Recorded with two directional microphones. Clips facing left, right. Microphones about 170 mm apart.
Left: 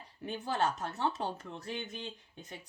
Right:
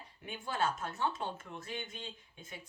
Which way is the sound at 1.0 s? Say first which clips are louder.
Left 2 dB; 35° left (ahead or behind).